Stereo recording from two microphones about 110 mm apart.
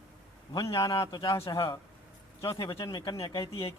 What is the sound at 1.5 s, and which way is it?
Speech, 45° left (ahead or behind).